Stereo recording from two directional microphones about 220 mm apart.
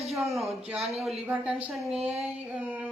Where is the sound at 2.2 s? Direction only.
5° right (ahead or behind).